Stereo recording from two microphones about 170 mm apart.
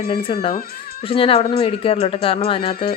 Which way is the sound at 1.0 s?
35° left (ahead or behind).